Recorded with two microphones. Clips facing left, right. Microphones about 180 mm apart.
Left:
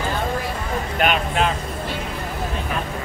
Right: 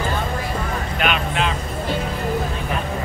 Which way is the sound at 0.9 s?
40° left (ahead or behind).